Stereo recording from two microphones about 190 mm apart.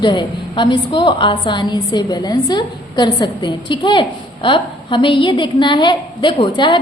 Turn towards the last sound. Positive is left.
turn(degrees=25)  # may be behind; listen again after turning